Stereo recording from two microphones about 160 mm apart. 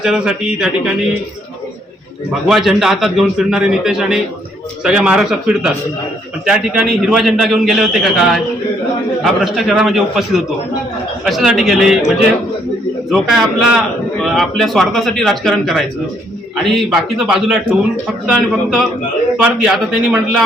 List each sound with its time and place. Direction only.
0.0 s a man's voice: 5° right (ahead or behind)
2.5 s a man's voice: centre (ahead or behind)
13.1 s a man's voice: centre (ahead or behind)